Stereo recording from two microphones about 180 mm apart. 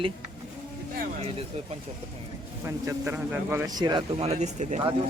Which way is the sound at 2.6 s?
15° right (ahead or behind).